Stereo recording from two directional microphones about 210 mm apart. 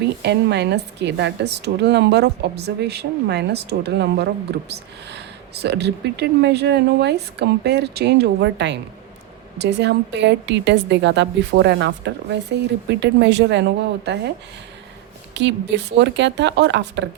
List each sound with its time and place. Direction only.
0.2 s a woman's voice: 55° right (ahead or behind)
15.4 s a woman's voice: 55° right (ahead or behind)